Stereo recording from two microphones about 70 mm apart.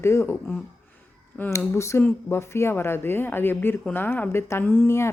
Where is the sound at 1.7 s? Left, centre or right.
Left.